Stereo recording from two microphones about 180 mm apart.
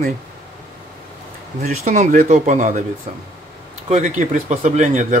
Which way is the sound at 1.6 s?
40° right (ahead or behind).